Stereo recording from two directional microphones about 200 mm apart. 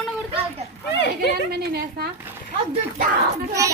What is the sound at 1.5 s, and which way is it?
Speech, 50° right (ahead or behind).